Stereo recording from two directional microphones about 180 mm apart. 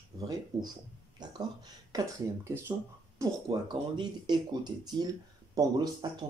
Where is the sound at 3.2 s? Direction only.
25° right (ahead or behind).